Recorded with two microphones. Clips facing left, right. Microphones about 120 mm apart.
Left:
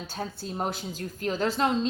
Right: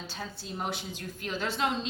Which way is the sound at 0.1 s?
45° left (ahead or behind).